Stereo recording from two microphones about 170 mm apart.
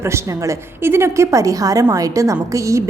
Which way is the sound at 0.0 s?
15° right (ahead or behind).